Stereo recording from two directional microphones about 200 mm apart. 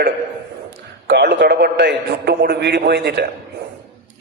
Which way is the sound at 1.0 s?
60° right (ahead or behind).